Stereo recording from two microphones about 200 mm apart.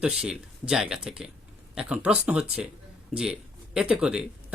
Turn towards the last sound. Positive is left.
turn(degrees=-5)  # may be behind; listen again after turning